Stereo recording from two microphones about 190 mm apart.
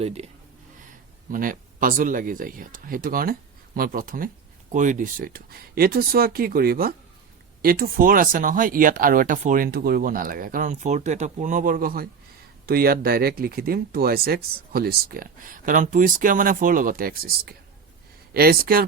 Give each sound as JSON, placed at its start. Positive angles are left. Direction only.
{"t": 0.0, "sound": "speech", "side_deg": -35}
{"t": 1.3, "sound": "speech", "side_deg": -45}